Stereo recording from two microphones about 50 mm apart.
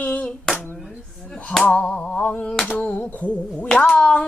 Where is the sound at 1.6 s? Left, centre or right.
Left.